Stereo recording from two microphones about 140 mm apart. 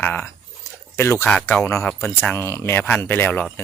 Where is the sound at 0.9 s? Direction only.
20° left (ahead or behind).